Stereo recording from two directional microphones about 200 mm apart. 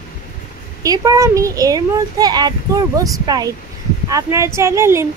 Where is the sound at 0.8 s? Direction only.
15° right (ahead or behind).